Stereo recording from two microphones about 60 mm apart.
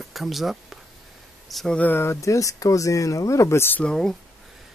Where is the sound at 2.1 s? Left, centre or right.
Left.